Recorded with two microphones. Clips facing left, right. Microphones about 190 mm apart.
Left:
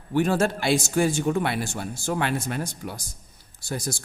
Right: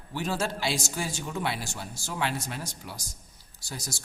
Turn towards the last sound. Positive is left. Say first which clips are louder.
# left 9 dB
turn(degrees=55)  # may be behind; listen again after turning